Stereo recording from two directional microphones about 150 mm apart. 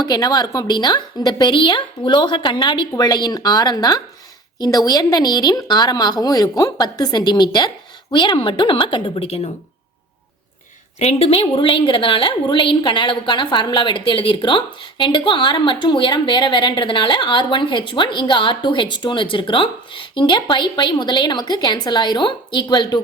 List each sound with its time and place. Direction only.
0.0 s a woman's voice: 25° left (ahead or behind)
11.0 s a woman's voice: 45° left (ahead or behind)